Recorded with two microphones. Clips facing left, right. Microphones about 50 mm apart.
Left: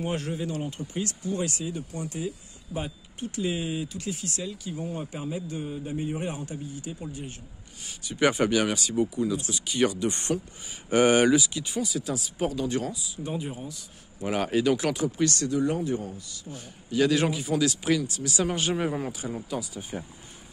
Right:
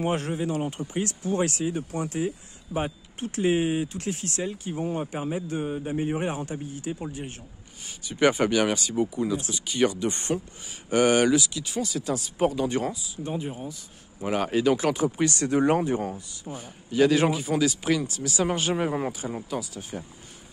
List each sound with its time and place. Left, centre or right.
0.1 s speech: right
1.2 s speech: right
2.0 s speech: right
7.8 s speech: centre
15.0 s speech: right
15.5 s speech: right
16.5 s speech: centre